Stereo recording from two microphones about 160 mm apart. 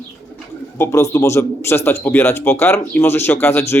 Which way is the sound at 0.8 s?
20° left (ahead or behind).